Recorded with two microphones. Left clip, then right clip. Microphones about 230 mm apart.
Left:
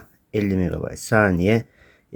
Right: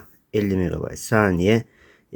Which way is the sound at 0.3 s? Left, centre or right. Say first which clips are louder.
Right 1 dB; centre.